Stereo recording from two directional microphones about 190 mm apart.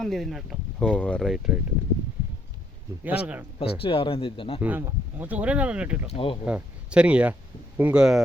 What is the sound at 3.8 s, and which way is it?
Speech, 30° left (ahead or behind).